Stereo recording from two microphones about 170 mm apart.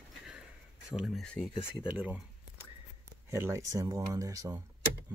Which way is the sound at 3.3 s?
15° right (ahead or behind).